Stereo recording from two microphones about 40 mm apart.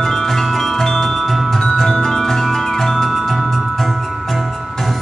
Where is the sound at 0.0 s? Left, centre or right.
Centre.